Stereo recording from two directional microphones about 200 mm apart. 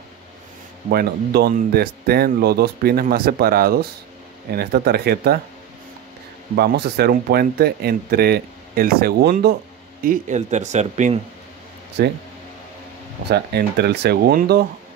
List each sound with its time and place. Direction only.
0.8 s speech: 50° right (ahead or behind)
6.5 s speech: 55° right (ahead or behind)
10.0 s speech: 40° right (ahead or behind)
12.0 s speech: 55° right (ahead or behind)
13.3 s speech: 55° right (ahead or behind)